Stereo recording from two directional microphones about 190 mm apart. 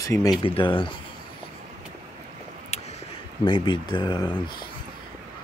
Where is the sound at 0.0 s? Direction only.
15° left (ahead or behind).